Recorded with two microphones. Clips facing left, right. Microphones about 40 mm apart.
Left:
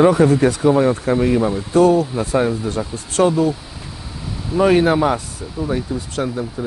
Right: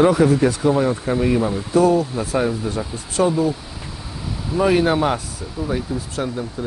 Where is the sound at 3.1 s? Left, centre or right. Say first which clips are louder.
Left 3 dB; left.